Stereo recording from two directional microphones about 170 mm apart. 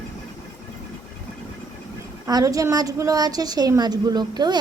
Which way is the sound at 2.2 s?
20° right (ahead or behind).